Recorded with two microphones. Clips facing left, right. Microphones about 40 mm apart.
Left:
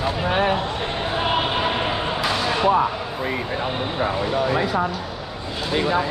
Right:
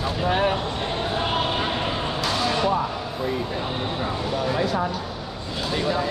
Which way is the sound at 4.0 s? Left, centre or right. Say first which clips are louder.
Left 7 dB; centre.